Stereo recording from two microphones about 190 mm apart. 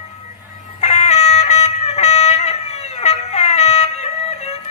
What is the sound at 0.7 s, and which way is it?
Music, 35° left (ahead or behind).